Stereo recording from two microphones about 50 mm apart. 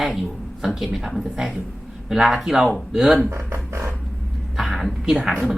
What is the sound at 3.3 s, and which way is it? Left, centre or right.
Speech, right.